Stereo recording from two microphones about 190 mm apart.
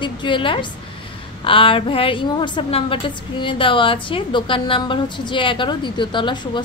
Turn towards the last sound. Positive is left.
turn(degrees=25)  # may be behind; listen again after turning